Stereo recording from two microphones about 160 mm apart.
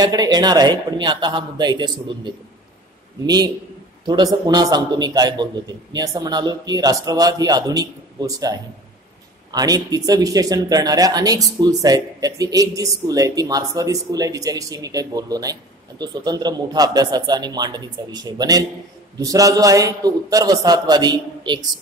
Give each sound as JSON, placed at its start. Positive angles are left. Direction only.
{"t": 0.0, "sound": "speech", "side_deg": -25}
{"t": 4.0, "sound": "speech", "side_deg": -25}